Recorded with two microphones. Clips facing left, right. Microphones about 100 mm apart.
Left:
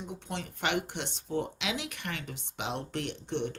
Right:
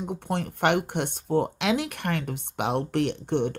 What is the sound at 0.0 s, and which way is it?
Speech, 55° right (ahead or behind).